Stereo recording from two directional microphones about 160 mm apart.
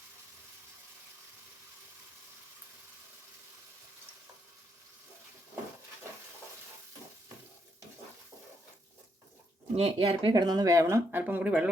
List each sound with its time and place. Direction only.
9.7 s speech: 40° right (ahead or behind)
10.3 s speech: 25° right (ahead or behind); by 11.7 s 10° right (ahead or behind)